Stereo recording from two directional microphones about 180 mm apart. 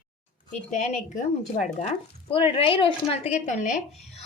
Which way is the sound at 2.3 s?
30° left (ahead or behind).